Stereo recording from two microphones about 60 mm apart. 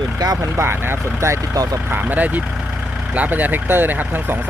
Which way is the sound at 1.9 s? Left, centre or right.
Right.